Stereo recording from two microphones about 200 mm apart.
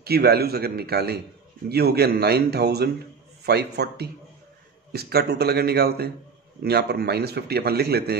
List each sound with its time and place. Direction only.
0.0 s a man's voice: 50° right (ahead or behind)